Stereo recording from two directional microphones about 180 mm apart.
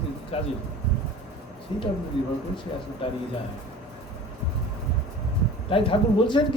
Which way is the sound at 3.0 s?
30° left (ahead or behind).